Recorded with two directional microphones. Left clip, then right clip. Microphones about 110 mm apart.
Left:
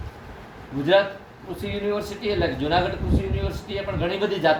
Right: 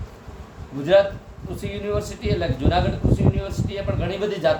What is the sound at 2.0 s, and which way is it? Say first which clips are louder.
Speech: left 1 dB; 15° right (ahead or behind).